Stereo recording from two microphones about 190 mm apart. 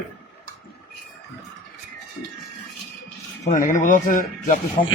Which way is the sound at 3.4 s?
45° left (ahead or behind).